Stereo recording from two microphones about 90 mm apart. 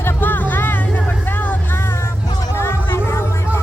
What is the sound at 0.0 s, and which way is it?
Vehicle, 20° left (ahead or behind).